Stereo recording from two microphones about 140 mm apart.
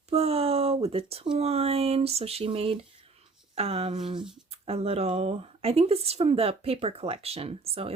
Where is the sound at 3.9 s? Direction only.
35° right (ahead or behind).